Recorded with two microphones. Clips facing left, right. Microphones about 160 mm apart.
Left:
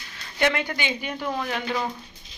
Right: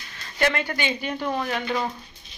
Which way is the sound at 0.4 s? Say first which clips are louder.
Even; 15° left (ahead or behind).